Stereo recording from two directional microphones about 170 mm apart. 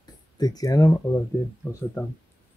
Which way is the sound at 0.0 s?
25° left (ahead or behind).